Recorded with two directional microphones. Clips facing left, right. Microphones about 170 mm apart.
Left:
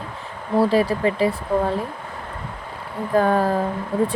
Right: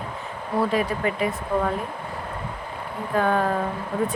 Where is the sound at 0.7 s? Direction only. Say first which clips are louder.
Left 5 dB; 35° left (ahead or behind).